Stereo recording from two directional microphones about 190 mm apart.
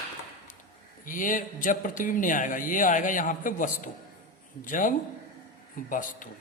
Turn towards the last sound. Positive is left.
turn(degrees=45)  # may be behind; listen again after turning